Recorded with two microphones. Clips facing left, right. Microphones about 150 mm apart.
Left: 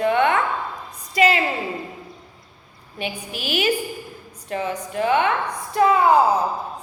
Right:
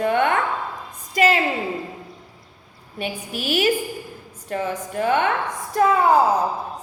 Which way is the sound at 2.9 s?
40° right (ahead or behind).